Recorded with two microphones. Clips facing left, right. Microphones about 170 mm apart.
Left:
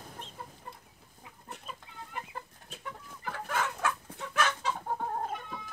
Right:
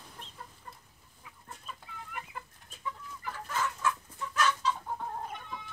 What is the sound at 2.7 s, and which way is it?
Chicken, 60° left (ahead or behind).